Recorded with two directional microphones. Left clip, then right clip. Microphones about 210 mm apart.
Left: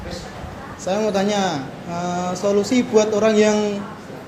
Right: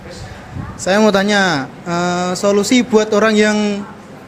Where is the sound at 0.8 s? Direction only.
55° right (ahead or behind).